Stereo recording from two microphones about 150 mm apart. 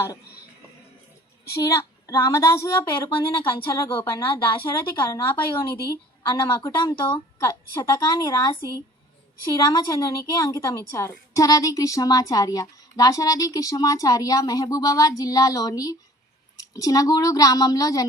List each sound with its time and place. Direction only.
1.5 s a woman's voice: 20° left (ahead or behind)
3.1 s a woman's voice: 35° left (ahead or behind)